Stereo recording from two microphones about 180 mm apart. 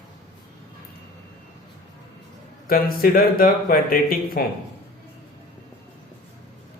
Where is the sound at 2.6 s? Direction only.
55° left (ahead or behind).